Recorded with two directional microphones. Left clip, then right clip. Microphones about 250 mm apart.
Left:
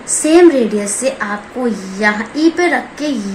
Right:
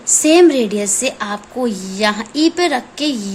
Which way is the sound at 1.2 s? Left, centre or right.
Right.